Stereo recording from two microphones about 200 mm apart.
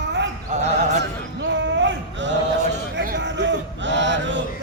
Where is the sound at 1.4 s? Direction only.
65° right (ahead or behind).